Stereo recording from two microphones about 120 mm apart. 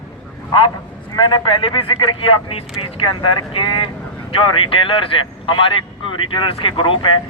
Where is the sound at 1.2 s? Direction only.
40° left (ahead or behind).